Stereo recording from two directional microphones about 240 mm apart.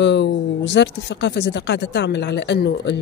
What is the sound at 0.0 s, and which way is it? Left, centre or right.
A woman's voice, left.